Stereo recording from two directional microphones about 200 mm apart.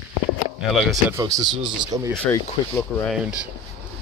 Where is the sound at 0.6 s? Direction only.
Centre (ahead or behind).